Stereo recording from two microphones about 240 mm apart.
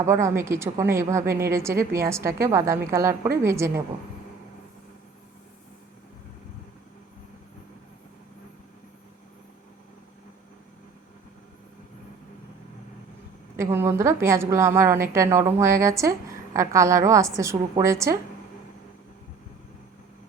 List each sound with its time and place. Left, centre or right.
0.0 s a woman's voice: centre
13.6 s a woman's voice: centre